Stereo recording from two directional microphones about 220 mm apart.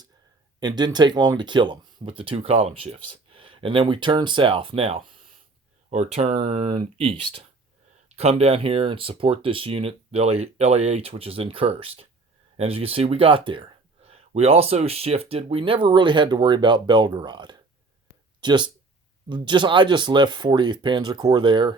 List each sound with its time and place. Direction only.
0.6 s speech: 20° right (ahead or behind)